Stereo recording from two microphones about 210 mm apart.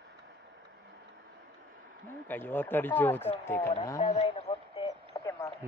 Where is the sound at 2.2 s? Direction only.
10° left (ahead or behind).